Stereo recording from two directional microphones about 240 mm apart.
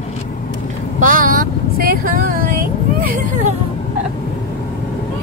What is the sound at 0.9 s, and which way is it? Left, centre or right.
Speech, right.